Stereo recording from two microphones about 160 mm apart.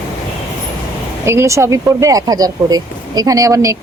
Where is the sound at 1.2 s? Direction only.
15° right (ahead or behind).